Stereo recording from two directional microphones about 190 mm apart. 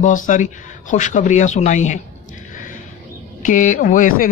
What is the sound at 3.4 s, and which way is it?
Speech, 40° left (ahead or behind).